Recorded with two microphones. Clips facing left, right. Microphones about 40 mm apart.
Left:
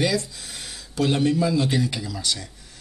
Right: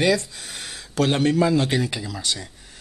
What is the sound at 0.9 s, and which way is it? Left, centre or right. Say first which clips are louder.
Speech: right 1 dB; right.